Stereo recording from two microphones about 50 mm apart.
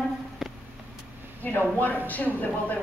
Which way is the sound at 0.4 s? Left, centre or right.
Centre.